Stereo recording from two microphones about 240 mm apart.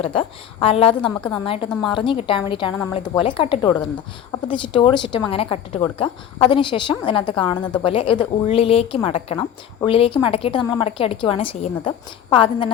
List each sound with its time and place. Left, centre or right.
0.0 s a woman's voice: left